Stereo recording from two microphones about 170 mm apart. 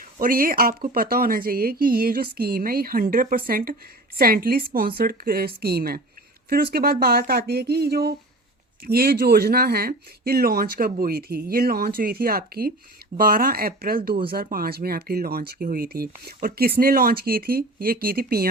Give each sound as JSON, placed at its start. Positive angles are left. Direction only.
{"t": 0.2, "sound": "speech", "side_deg": -55}